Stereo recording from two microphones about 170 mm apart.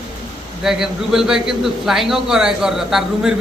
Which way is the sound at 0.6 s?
Centre (ahead or behind).